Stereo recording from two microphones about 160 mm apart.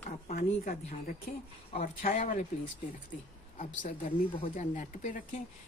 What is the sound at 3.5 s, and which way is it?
Speech, 55° left (ahead or behind).